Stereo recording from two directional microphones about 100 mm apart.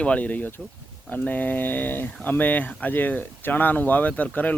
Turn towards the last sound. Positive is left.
turn(degrees=15)  # may be behind; listen again after turning